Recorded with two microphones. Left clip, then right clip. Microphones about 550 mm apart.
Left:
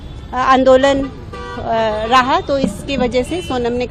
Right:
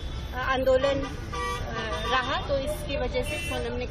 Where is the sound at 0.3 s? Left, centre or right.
Left.